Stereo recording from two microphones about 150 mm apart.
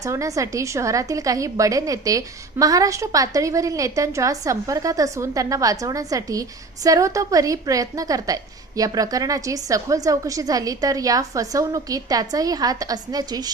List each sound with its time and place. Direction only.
0.0 s a woman's voice: 20° right (ahead or behind)